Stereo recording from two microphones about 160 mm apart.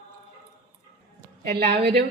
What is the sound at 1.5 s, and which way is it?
Speech, 90° right.